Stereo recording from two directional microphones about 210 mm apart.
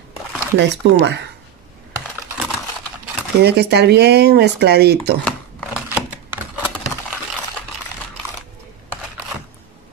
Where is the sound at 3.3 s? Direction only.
50° right (ahead or behind).